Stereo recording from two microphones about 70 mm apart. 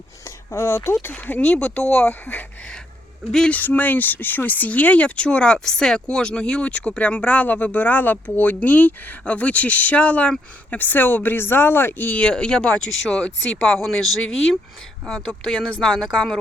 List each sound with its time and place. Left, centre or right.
0.3 s speech: left
1.1 s speech: left
3.5 s speech: left
13.6 s speech: centre